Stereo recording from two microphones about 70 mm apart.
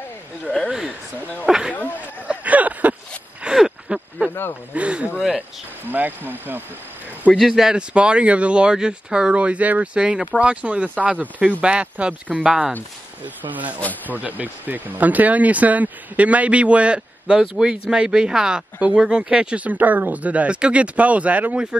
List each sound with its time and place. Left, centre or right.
0.7 s speech: centre
2.2 s a sound: right
3.4 s a sound: centre
4.3 s speech: left
4.7 s speech: centre
7.3 s speech: centre
12.4 s speech: centre
13.2 s speech: right
17.4 s speech: centre